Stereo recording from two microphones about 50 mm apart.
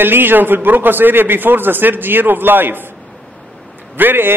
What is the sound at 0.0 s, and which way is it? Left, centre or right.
A man's voice, right.